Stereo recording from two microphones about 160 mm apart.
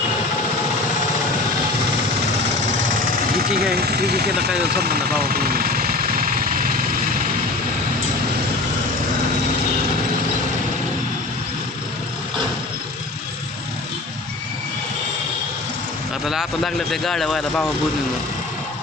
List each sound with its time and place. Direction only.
3.3 s vehicle: 80° right; by 6.7 s 60° right (ahead or behind)
16.2 s speech: centre (ahead or behind)